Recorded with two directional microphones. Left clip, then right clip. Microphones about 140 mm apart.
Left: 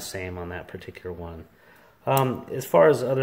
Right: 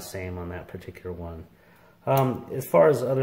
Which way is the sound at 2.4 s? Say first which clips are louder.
Left 1 dB; 15° left (ahead or behind).